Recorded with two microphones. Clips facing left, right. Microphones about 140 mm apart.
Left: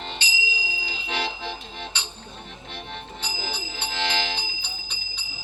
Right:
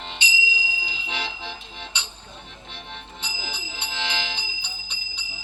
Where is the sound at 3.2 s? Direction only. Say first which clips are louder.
Left 3 dB; 20° right (ahead or behind).